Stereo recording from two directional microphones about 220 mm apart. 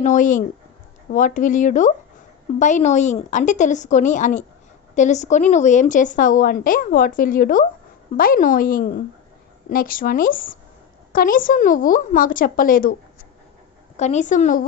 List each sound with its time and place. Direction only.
0.0 s speech: 35° left (ahead or behind)
13.9 s speech: 30° left (ahead or behind)